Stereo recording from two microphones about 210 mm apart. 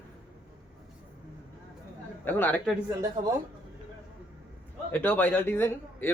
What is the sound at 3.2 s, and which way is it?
Speech, 30° right (ahead or behind).